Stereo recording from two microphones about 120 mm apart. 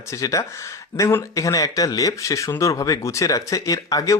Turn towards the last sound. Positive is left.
turn(degrees=30)  # may be behind; listen again after turning